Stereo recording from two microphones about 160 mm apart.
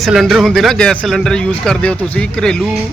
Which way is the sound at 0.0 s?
Centre (ahead or behind).